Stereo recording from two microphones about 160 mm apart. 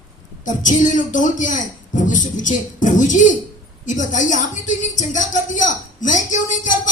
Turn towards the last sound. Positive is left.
turn(degrees=50)  # may be behind; listen again after turning